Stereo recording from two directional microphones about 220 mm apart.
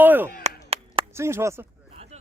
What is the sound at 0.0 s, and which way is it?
Chop, 10° right (ahead or behind).